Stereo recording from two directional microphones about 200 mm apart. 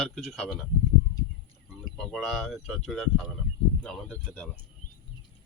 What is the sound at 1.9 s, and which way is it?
Speech, centre (ahead or behind).